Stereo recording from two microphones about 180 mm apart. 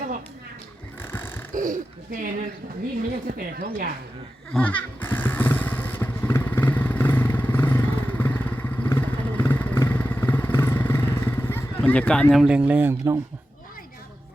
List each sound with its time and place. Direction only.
1.0 s a sound: 10° left (ahead or behind)
1.5 s speech: 45° right (ahead or behind)
4.5 s motorcycle: 10° left (ahead or behind)
11.9 s speech: 5° left (ahead or behind); by 13.1 s 10° right (ahead or behind)